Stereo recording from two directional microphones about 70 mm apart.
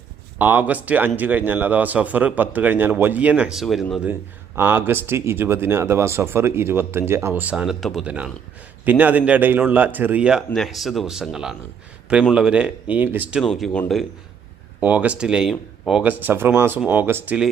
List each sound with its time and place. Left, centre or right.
0.3 s a man's voice: right
3.5 s speech: centre
4.5 s speech: right
7.5 s speech: centre
8.0 s a man's voice: centre
10.5 s speech: centre; by 13.3 s right
13.4 s speech: centre
14.8 s speech: right
16.0 s a man's voice: right
17.1 s speech: right